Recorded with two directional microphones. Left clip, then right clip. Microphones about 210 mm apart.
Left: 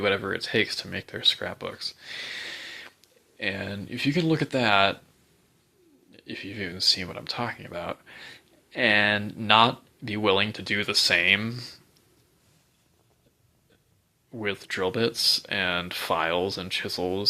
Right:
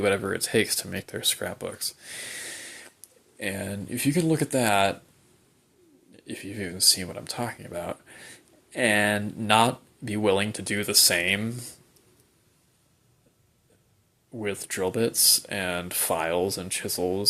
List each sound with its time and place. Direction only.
0.0 s speech: 20° right (ahead or behind)
6.1 s speech: 15° right (ahead or behind)
14.3 s speech: 5° right (ahead or behind)